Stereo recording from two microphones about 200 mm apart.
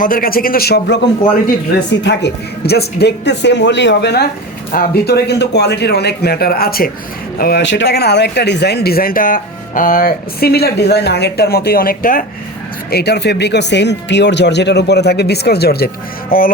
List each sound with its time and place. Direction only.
0.0 s speech: 45° left (ahead or behind)
2.0 s speech: 60° left (ahead or behind)